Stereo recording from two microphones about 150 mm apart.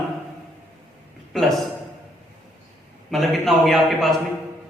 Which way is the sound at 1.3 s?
Centre (ahead or behind).